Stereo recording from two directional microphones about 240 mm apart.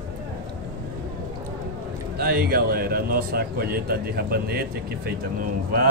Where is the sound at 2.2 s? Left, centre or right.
Right.